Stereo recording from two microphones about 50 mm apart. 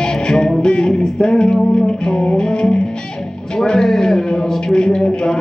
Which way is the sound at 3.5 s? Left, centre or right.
Centre.